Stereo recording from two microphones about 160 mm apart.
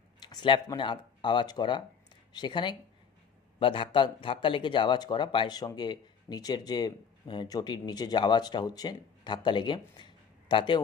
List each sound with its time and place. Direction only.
0.2 s speech: 25° left (ahead or behind)